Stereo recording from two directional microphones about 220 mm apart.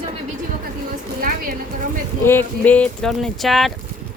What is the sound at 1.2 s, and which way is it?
Speech, 40° right (ahead or behind).